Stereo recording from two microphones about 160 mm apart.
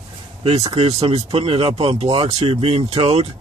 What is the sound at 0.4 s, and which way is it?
Speech, 40° right (ahead or behind).